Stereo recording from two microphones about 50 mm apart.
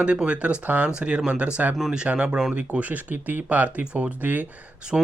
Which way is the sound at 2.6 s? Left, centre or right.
Right.